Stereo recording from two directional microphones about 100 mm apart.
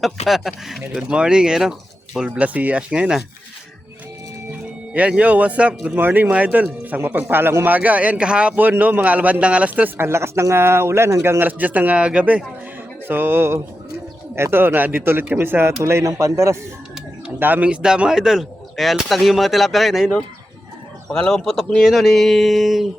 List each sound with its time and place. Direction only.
0.3 s speech: centre (ahead or behind)
4.9 s speech: 15° right (ahead or behind)
13.1 s speech: 20° right (ahead or behind)
17.4 s speech: 15° right (ahead or behind)
21.1 s speech: 5° left (ahead or behind)